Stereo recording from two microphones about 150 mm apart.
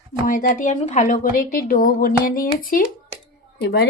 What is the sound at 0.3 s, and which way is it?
A woman's voice, 60° left (ahead or behind).